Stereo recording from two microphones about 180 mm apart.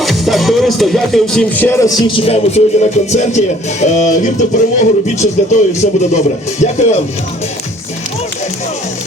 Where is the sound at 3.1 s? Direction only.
40° left (ahead or behind).